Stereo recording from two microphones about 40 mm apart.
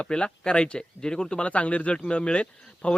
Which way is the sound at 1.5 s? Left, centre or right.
Left.